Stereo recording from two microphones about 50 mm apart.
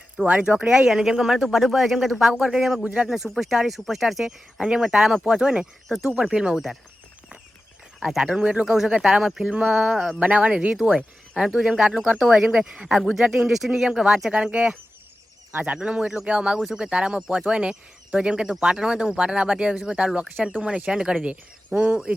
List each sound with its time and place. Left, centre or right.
0.3 s speech: right
0.7 s speech: centre
3.1 s speech: centre
4.6 s speech: centre
7.9 s speech: centre
9.5 s speech: right
9.8 s speech: centre
10.2 s speech: right
10.9 s speech: centre
12.2 s speech: centre
12.5 s speech: centre
13.0 s speech: centre; by 22.1 s right